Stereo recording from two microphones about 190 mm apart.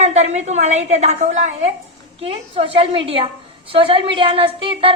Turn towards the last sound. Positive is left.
turn(degrees=-25)  # may be behind; listen again after turning